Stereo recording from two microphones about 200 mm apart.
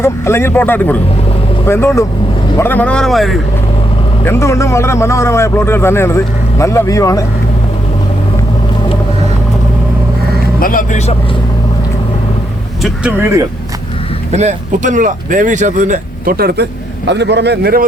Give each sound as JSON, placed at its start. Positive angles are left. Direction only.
{"t": 0.0, "sound": "a man's voice", "side_deg": 10}
{"t": 4.3, "sound": "a man's voice", "side_deg": 15}
{"t": 10.6, "sound": "speech", "side_deg": 45}
{"t": 12.8, "sound": "speech", "side_deg": -5}
{"t": 14.3, "sound": "speech", "side_deg": -35}